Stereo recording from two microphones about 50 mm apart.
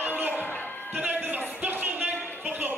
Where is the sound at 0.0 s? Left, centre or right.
Right.